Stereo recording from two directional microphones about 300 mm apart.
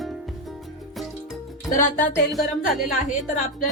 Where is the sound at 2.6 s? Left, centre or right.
Left.